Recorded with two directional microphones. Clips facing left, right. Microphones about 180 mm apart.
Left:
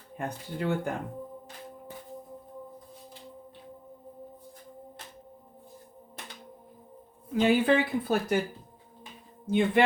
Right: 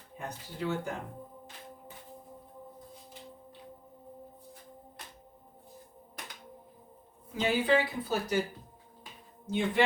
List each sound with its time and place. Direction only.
0.2 s speech: 60° left (ahead or behind)
7.3 s speech: 55° left (ahead or behind)
9.5 s speech: 55° left (ahead or behind)